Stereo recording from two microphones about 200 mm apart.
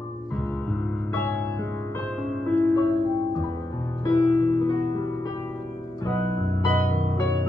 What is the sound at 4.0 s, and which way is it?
Music, 20° left (ahead or behind).